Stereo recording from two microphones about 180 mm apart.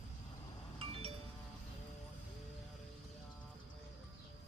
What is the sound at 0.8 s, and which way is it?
Music, 30° right (ahead or behind).